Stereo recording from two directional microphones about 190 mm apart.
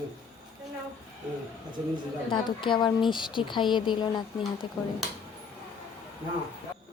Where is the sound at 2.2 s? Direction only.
25° left (ahead or behind).